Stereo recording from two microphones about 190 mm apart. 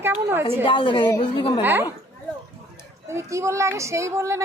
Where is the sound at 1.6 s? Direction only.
10° right (ahead or behind).